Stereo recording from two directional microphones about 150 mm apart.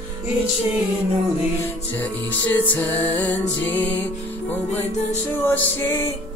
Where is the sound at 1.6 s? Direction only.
10° left (ahead or behind).